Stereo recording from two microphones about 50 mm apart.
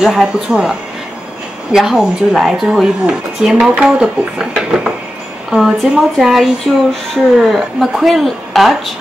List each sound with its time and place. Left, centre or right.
0.0 s speech: centre
2.7 s speech: centre